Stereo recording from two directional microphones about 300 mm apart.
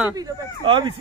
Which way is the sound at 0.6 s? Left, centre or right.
Centre.